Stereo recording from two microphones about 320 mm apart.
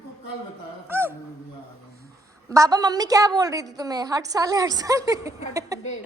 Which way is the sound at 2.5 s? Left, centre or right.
Centre.